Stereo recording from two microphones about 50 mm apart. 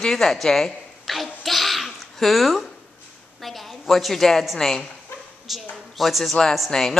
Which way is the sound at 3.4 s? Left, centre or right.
Centre.